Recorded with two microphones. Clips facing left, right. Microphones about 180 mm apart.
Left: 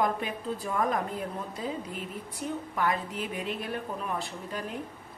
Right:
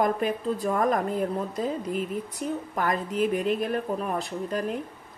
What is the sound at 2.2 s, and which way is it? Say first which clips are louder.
Speech: right 4 dB; 45° right (ahead or behind).